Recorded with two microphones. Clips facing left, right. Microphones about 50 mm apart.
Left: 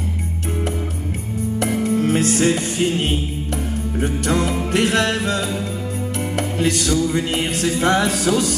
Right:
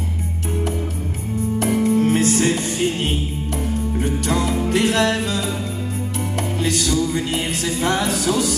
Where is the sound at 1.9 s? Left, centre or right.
Left.